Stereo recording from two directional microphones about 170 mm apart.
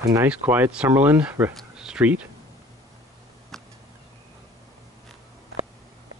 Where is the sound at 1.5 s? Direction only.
5° right (ahead or behind).